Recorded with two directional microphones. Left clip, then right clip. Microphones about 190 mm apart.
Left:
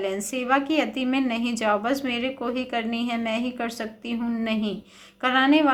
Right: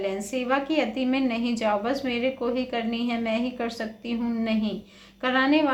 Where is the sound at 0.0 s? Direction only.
25° left (ahead or behind).